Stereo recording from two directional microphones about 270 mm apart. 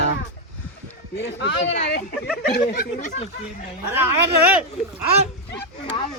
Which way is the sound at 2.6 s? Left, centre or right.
Left.